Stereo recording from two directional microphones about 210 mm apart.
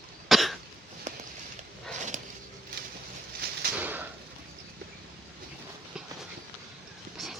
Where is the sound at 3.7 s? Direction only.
10° right (ahead or behind).